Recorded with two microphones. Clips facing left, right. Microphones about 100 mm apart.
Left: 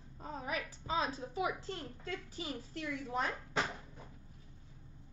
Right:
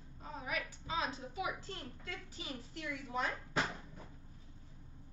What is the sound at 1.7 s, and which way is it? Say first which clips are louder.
A woman's voice: left 5 dB; 30° left (ahead or behind).